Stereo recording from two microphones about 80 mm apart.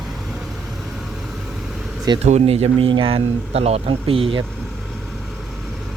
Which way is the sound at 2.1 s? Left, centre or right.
Right.